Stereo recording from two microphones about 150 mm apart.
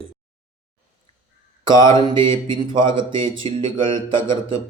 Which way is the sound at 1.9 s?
30° right (ahead or behind).